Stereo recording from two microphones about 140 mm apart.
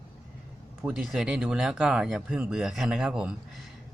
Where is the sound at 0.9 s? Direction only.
Centre (ahead or behind).